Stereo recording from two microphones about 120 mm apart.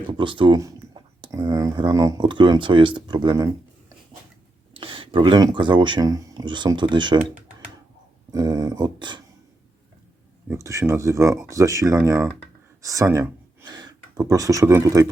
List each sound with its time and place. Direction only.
0.1 s speech: 45° right (ahead or behind)
0.5 s speech: 30° right (ahead or behind)
2.2 s speech: 40° right (ahead or behind)
4.7 s a sound: 45° right (ahead or behind)
5.4 s speech: 40° right (ahead or behind)
6.1 s speech: 30° right (ahead or behind)
8.3 s speech: 30° right (ahead or behind)
10.5 s speech: 25° right (ahead or behind)
13.7 s speech: 35° right (ahead or behind)